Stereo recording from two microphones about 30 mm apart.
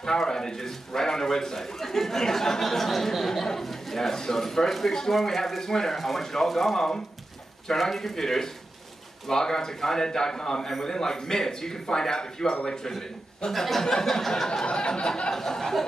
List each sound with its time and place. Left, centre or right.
0.0 s a man's voice: centre
13.5 s a man's voice: centre
14.3 s a man's voice: left
14.7 s a man's voice: left
15.3 s a man's voice: centre